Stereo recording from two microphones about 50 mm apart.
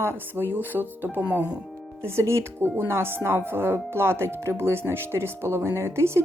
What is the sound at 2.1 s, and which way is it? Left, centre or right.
Speech, right.